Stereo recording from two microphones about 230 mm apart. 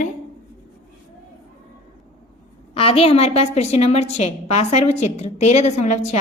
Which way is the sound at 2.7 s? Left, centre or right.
Left.